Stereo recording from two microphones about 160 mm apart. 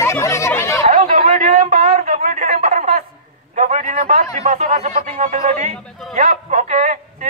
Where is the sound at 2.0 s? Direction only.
50° right (ahead or behind).